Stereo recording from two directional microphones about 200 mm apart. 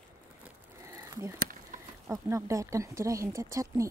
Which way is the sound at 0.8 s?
15° right (ahead or behind).